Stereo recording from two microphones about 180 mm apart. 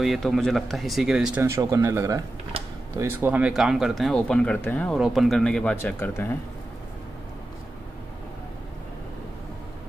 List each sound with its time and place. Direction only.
0.0 s speech: centre (ahead or behind)
1.4 s speech: 15° right (ahead or behind); by 6.3 s 10° left (ahead or behind)